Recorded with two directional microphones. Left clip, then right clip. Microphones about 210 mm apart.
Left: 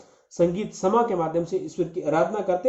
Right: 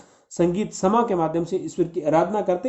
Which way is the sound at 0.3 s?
45° right (ahead or behind).